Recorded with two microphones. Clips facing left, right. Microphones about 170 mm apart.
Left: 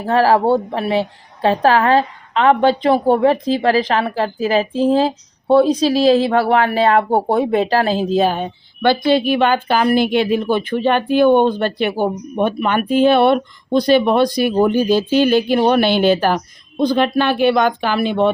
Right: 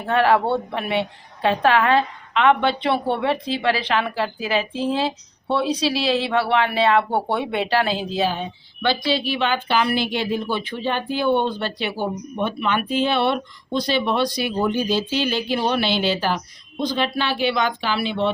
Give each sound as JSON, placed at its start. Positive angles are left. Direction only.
{"t": 0.0, "sound": "a woman's voice", "side_deg": 35}